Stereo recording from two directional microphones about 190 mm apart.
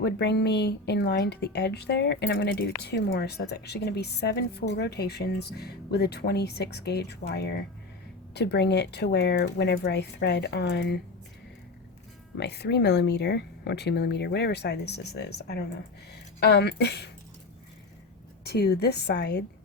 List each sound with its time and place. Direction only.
0.0 s speech: 60° left (ahead or behind)
12.4 s speech: 60° left (ahead or behind)
18.4 s speech: 55° left (ahead or behind)